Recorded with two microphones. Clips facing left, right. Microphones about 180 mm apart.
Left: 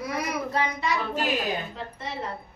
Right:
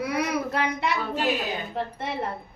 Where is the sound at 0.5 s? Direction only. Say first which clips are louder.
Right 1 dB; 60° right (ahead or behind).